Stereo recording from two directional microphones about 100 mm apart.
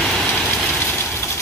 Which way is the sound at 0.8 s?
20° left (ahead or behind).